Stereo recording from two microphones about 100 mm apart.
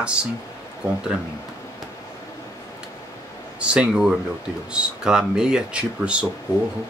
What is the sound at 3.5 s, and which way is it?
Speech, 10° right (ahead or behind).